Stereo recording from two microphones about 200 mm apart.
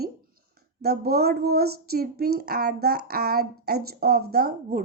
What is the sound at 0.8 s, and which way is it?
Speech, 50° right (ahead or behind).